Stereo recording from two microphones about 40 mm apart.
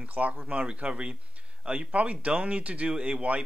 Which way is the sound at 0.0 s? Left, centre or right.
Right.